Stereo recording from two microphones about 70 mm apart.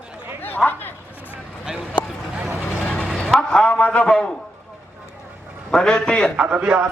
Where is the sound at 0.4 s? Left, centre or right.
Left.